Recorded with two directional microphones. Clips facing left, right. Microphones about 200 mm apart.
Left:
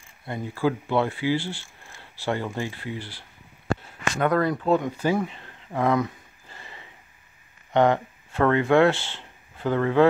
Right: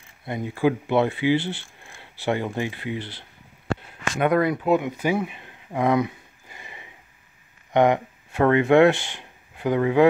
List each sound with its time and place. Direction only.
0.2 s speech: 15° right (ahead or behind)
3.7 s a sound: 70° right (ahead or behind)
4.2 s speech: 15° right (ahead or behind)